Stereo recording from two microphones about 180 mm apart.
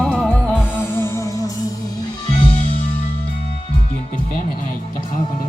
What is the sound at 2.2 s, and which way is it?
Music, 30° left (ahead or behind).